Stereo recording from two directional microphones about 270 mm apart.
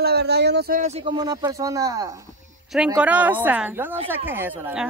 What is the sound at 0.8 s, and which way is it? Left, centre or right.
A woman's voice, centre.